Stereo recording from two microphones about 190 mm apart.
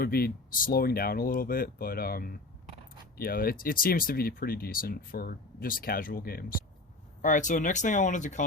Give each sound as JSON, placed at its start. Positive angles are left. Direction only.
{"t": 0.0, "sound": "speech", "side_deg": 50}